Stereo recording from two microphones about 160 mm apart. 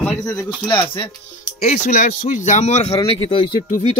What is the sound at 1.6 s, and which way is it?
Speech, 45° left (ahead or behind).